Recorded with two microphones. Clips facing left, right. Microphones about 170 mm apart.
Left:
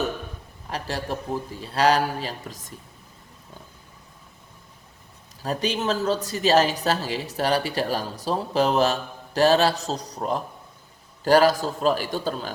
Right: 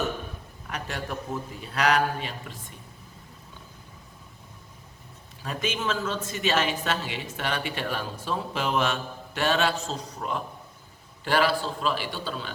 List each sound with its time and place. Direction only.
0.7 s a woman's voice: 35° left (ahead or behind)
5.4 s a woman's voice: 35° left (ahead or behind)